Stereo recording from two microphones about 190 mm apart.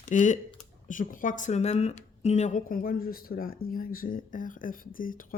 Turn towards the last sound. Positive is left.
turn(degrees=45)  # may be behind; listen again after turning